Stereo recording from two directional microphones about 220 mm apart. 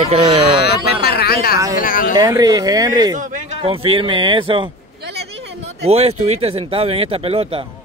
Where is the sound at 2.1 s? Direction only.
15° right (ahead or behind).